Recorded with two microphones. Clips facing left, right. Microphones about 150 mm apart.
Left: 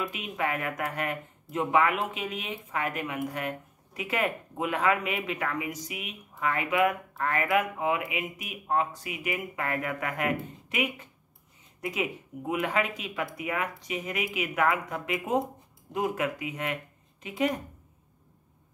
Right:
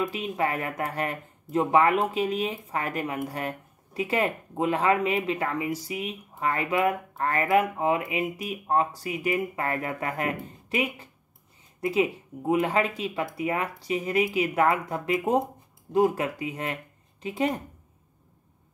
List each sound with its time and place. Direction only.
0.1 s a woman's voice: 30° right (ahead or behind)